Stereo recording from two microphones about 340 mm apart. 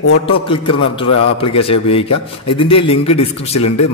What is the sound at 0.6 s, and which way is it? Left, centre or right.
Speech, left.